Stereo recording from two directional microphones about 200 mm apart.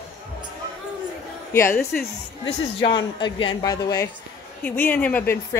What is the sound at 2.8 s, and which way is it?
Speech, 25° left (ahead or behind).